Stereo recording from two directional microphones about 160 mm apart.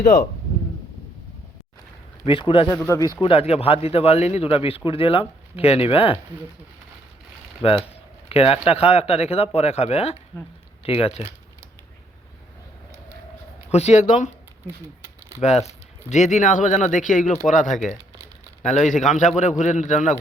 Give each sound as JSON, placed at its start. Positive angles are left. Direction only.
{"t": 2.2, "sound": "speech", "side_deg": 30}
{"t": 2.7, "sound": "speech", "side_deg": 15}
{"t": 3.2, "sound": "speech", "side_deg": 35}
{"t": 7.6, "sound": "speech", "side_deg": 35}
{"t": 13.7, "sound": "speech", "side_deg": 45}
{"t": 15.4, "sound": "speech", "side_deg": 45}